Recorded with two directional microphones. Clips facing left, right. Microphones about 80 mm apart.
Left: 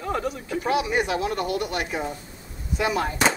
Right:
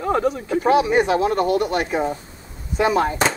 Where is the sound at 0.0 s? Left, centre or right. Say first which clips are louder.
Right 7 dB; right.